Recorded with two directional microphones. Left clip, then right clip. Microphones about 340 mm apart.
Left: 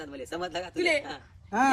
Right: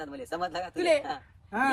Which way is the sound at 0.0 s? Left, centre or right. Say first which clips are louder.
Right 2 dB; centre.